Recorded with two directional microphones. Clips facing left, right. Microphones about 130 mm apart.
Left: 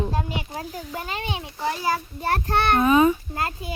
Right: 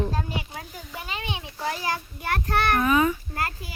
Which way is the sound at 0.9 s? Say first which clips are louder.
Left 2 dB; 45° left (ahead or behind).